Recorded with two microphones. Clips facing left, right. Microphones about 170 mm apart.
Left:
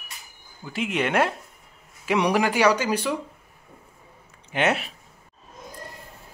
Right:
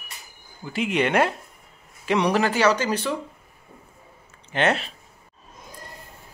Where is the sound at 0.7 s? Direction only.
Centre (ahead or behind).